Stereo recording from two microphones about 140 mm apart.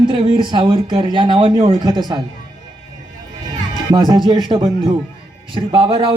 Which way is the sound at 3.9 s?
35° right (ahead or behind).